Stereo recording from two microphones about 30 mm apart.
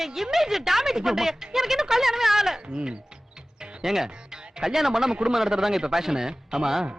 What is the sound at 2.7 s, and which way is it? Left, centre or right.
Speech, right.